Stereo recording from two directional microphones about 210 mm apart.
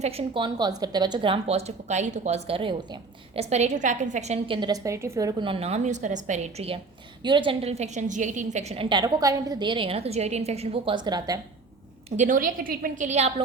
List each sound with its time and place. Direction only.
0.0 s a woman's voice: 30° right (ahead or behind)
12.1 s a woman's voice: 35° right (ahead or behind)